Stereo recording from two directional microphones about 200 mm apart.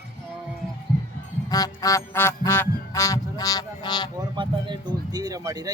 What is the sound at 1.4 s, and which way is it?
Music, 20° left (ahead or behind).